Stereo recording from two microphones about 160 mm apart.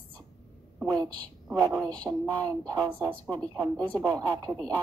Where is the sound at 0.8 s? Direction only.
25° right (ahead or behind).